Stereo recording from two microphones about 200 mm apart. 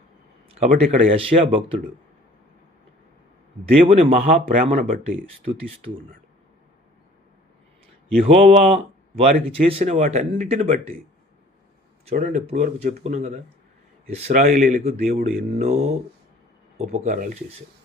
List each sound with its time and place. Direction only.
0.4 s speech: 30° right (ahead or behind)
3.8 s speech: 30° right (ahead or behind)
8.3 s speech: 30° right (ahead or behind)
12.0 s speech: 40° right (ahead or behind)